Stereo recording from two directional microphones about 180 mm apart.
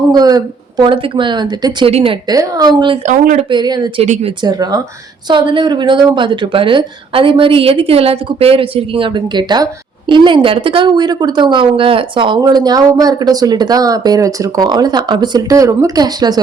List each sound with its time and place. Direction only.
0.1 s speech: 20° right (ahead or behind)
2.2 s speech: 20° right (ahead or behind)
3.1 s speech: 45° right (ahead or behind)
3.5 s speech: 25° right (ahead or behind)
4.0 s speech: 40° right (ahead or behind)
4.4 s speech: 20° right (ahead or behind)